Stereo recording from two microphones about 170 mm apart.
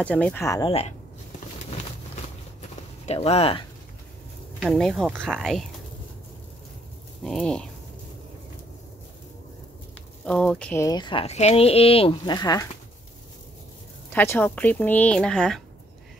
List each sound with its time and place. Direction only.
0.0 s speech: 10° left (ahead or behind)
0.6 s speech: 35° left (ahead or behind)
1.6 s a sound: 40° left (ahead or behind)
3.1 s speech: 40° left (ahead or behind)
4.6 s speech: centre (ahead or behind)
7.2 s speech: 5° left (ahead or behind)
10.2 s speech: 5° left (ahead or behind); by 12.6 s 20° left (ahead or behind)
14.1 s speech: 10° left (ahead or behind)